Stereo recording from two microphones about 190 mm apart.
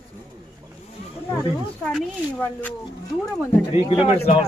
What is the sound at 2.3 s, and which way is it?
Speech, 10° left (ahead or behind).